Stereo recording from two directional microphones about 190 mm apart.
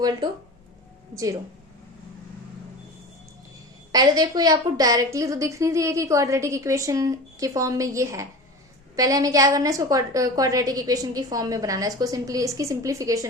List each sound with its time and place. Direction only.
1.1 s a woman's voice: 15° right (ahead or behind)
3.9 s a woman's voice: 20° right (ahead or behind)